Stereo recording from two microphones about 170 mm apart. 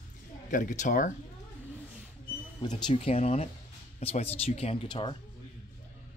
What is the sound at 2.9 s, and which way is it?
Speech, 35° left (ahead or behind).